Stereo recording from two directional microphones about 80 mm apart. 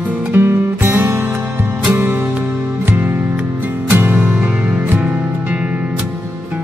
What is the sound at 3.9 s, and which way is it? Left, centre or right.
Music, right.